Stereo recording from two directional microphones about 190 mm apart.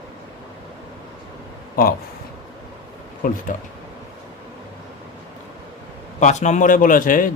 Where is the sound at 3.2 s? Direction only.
45° left (ahead or behind).